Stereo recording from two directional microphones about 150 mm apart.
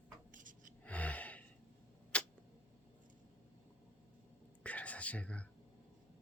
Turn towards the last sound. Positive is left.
turn(degrees=10)  # may be behind; listen again after turning